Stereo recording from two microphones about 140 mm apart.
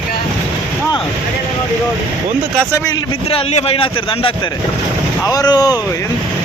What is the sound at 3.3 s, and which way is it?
A man's voice, 45° left (ahead or behind).